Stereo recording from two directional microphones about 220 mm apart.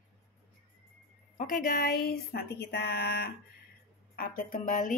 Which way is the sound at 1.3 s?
40° left (ahead or behind).